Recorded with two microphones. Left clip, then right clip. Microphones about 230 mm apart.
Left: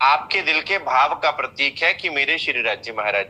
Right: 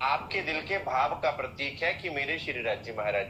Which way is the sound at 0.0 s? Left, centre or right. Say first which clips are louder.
Left 12 dB; left.